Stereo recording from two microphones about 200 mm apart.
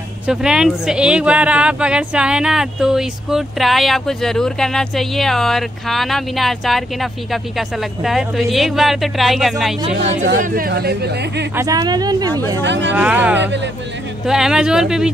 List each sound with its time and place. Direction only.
0.3 s speech: 5° right (ahead or behind)
10.2 s speech: 50° right (ahead or behind)
11.5 s a woman's voice: 15° right (ahead or behind)
12.6 s speech: 65° right (ahead or behind)
12.9 s speech: 10° right (ahead or behind)